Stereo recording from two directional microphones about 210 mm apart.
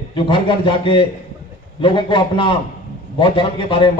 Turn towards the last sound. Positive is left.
turn(degrees=25)  # may be behind; listen again after turning